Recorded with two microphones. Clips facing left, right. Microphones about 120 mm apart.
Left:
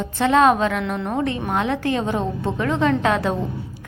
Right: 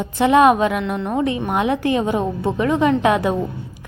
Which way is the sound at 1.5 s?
15° right (ahead or behind).